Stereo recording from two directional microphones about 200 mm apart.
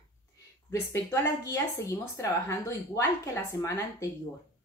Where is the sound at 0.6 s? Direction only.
15° left (ahead or behind).